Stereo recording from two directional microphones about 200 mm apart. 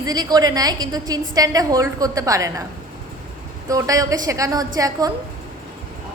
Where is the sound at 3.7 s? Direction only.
15° right (ahead or behind).